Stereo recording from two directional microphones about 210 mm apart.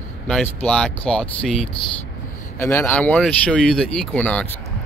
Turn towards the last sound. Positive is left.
turn(degrees=5)  # may be behind; listen again after turning